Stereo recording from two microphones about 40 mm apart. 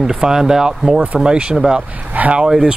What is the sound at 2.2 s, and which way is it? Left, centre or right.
Speech, right.